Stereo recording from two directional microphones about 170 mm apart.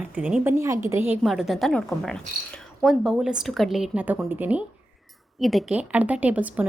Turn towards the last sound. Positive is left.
turn(degrees=-10)  # may be behind; listen again after turning